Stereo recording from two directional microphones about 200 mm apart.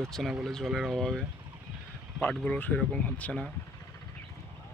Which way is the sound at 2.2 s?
5° left (ahead or behind).